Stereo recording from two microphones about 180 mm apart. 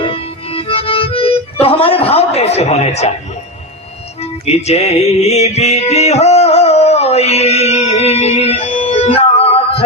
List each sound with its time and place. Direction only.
0.0 s accordion: 30° left (ahead or behind)
1.6 s a sound: 30° left (ahead or behind)
4.2 s music: 35° left (ahead or behind)